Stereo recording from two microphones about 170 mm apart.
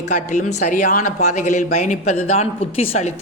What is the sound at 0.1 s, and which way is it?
Speech, 45° left (ahead or behind).